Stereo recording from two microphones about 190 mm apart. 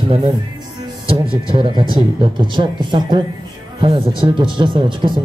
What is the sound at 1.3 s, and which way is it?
Speech, 25° right (ahead or behind).